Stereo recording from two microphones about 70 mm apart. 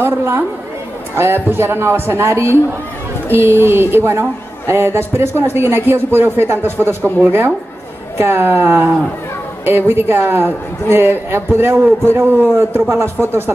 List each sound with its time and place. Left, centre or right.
0.0 s a man's voice: right
8.2 s a man's voice: right